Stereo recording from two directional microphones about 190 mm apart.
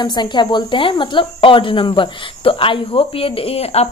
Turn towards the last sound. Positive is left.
turn(degrees=30)  # may be behind; listen again after turning